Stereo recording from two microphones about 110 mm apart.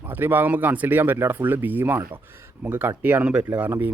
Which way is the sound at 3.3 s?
25° right (ahead or behind).